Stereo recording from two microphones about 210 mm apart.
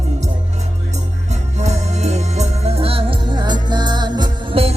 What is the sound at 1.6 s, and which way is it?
Music, 30° right (ahead or behind).